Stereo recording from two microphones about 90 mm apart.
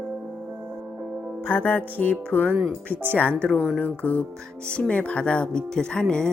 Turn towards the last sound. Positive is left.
turn(degrees=10)  # may be behind; listen again after turning